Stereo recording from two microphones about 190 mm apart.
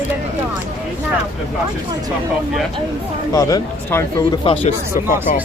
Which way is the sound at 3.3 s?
20° left (ahead or behind).